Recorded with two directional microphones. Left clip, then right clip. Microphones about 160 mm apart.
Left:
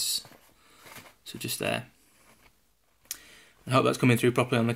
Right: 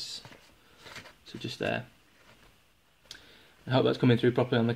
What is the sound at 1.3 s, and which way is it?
Speech, 15° left (ahead or behind).